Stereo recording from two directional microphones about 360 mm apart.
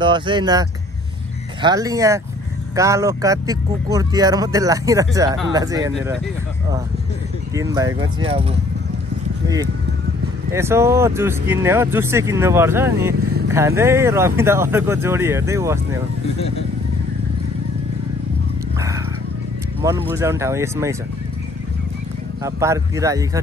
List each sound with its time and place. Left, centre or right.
0.0 s speech: centre
7.7 s speech: centre
10.5 s speech: centre
16.3 s speech: centre
19.8 s speech: centre
22.4 s speech: centre